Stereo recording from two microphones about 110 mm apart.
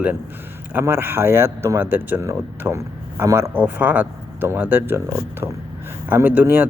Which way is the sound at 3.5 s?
15° right (ahead or behind).